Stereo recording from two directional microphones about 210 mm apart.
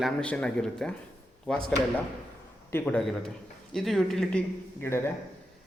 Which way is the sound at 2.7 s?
5° left (ahead or behind).